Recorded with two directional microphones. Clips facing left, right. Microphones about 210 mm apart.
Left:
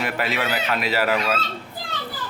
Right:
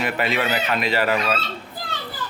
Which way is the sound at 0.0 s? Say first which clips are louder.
Right 2 dB; centre (ahead or behind).